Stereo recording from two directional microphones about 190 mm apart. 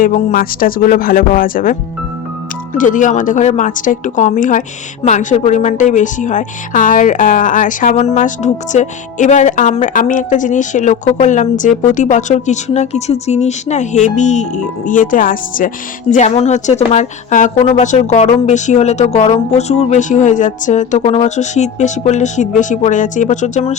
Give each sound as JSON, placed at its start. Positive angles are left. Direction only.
{"t": 0.0, "sound": "a woman's voice", "side_deg": 45}
{"t": 2.7, "sound": "a woman's voice", "side_deg": 45}